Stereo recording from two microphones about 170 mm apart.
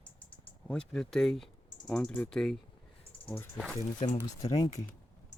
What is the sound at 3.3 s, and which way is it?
Speech, 15° left (ahead or behind).